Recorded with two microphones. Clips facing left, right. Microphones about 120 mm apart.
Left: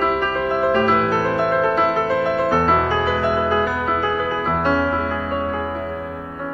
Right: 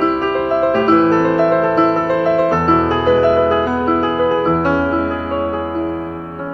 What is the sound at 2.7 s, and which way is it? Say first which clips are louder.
Music: right 6 dB; 30° right (ahead or behind).